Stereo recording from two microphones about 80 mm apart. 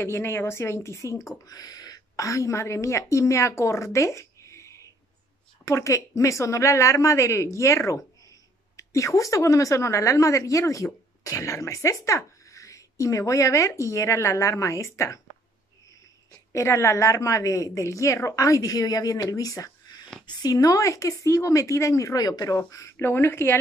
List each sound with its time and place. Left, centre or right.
0.0 s speech: left
1.4 s a woman's voice: left
16.5 s speech: left
23.0 s speech: left